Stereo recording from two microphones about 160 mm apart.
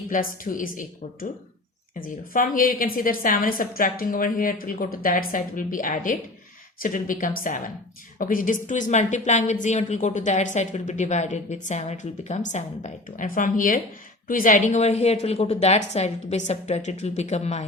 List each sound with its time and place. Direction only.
0.1 s a woman's voice: 60° left (ahead or behind); by 17.7 s 45° left (ahead or behind)